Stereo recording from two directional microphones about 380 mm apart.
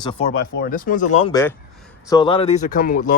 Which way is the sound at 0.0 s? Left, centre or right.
Centre.